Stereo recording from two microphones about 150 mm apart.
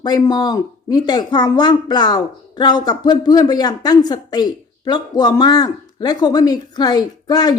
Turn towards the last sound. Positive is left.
turn(degrees=25)  # may be behind; listen again after turning